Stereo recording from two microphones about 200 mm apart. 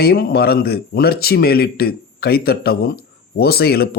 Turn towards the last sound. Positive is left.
turn(degrees=50)  # may be behind; listen again after turning